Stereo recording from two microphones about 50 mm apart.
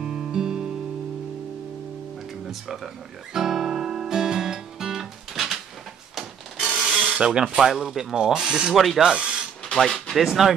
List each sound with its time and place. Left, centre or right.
0.0 s music: centre
2.4 s speech: centre
3.3 s guitar: centre
6.1 s printer: centre
7.1 s speech: centre
8.7 s speech: centre
9.0 s speech: centre
9.8 s speech: centre